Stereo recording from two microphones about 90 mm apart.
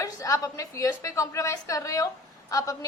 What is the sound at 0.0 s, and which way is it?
A woman's voice, 40° left (ahead or behind).